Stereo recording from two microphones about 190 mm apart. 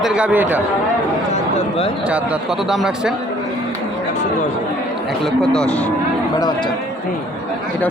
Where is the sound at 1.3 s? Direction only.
30° left (ahead or behind).